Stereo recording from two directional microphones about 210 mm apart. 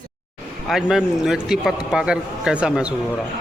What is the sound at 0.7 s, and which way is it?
A man's voice, centre (ahead or behind).